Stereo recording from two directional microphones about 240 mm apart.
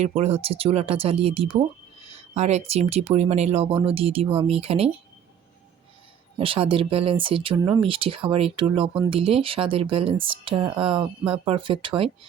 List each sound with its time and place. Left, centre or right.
0.0 s speech: right
6.4 s speech: right